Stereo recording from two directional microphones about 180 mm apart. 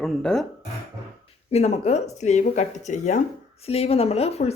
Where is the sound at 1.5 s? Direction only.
35° left (ahead or behind).